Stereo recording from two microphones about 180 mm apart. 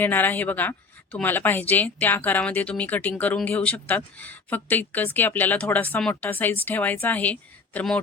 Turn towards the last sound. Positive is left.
turn(degrees=5)  # may be behind; listen again after turning